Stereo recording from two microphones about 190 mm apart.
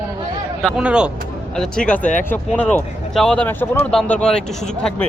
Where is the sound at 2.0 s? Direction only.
40° left (ahead or behind).